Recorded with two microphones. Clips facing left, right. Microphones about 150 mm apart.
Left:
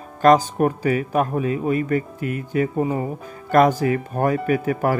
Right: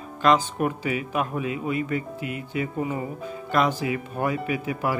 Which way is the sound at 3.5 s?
45° left (ahead or behind).